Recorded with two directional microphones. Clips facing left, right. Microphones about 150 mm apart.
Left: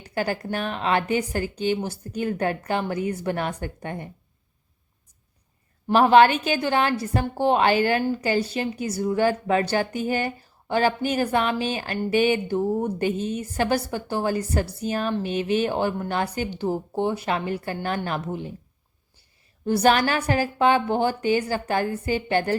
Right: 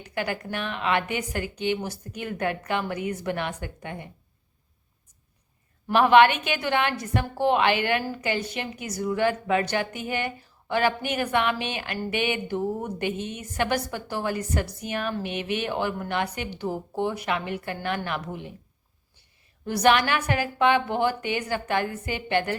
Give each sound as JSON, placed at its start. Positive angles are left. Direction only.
{"t": 0.0, "sound": "a woman's voice", "side_deg": 35}
{"t": 5.9, "sound": "a woman's voice", "side_deg": 35}
{"t": 19.6, "sound": "a woman's voice", "side_deg": 30}